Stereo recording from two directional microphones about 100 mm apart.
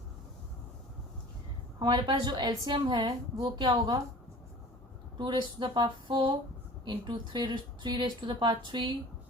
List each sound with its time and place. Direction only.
1.8 s speech: 50° right (ahead or behind)
5.1 s speech: 50° right (ahead or behind)